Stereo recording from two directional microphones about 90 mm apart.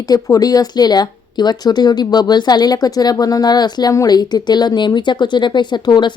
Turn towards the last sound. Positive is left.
turn(degrees=55)  # may be behind; listen again after turning